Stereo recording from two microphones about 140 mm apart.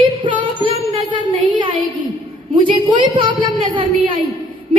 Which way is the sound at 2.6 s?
35° right (ahead or behind).